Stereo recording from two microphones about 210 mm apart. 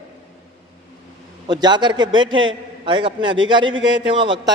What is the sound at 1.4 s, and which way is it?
A man's voice, 20° right (ahead or behind).